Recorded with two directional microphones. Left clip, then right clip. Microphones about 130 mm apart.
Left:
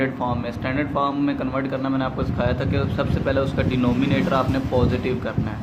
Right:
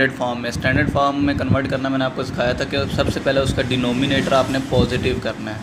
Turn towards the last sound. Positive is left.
turn(degrees=-30)  # may be behind; listen again after turning